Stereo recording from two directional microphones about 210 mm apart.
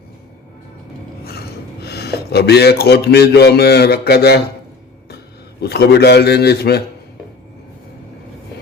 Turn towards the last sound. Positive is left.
turn(degrees=50)  # may be behind; listen again after turning